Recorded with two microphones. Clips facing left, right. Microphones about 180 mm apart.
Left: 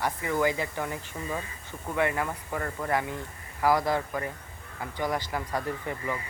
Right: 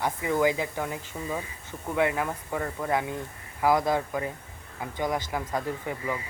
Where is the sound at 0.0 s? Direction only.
15° right (ahead or behind).